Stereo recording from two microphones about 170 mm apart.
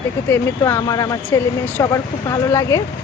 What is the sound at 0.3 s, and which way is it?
Speech, 15° left (ahead or behind).